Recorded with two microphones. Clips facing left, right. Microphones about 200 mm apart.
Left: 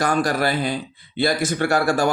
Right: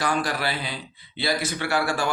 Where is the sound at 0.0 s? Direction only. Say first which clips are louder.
Left 5 dB; 45° left (ahead or behind).